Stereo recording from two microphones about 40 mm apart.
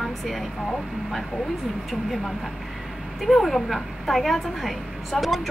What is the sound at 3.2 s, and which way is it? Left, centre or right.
A woman's voice, centre.